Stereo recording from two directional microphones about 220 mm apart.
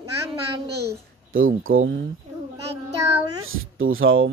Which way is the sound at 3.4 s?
65° right (ahead or behind).